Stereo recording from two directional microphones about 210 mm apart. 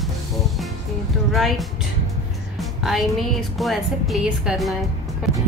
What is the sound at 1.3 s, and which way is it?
A woman's voice, centre (ahead or behind).